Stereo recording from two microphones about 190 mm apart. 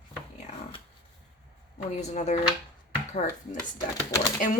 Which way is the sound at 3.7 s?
15° left (ahead or behind).